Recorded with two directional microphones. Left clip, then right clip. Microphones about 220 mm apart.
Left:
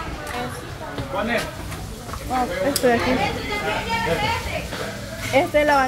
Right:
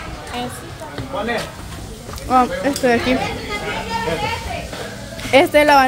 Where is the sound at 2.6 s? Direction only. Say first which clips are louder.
Right 2 dB; 15° right (ahead or behind).